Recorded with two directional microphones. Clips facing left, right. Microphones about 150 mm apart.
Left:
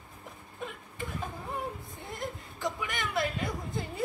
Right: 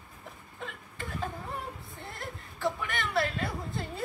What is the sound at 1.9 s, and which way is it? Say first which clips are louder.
Chuckle: left 3 dB; 20° left (ahead or behind).